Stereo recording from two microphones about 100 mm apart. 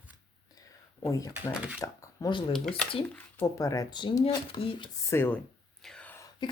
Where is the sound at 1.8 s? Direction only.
30° left (ahead or behind).